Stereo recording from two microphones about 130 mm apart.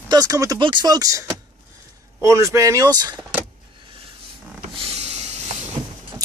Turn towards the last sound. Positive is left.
turn(degrees=-60)  # may be behind; listen again after turning